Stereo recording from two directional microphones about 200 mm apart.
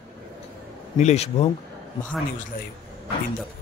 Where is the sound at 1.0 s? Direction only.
35° left (ahead or behind).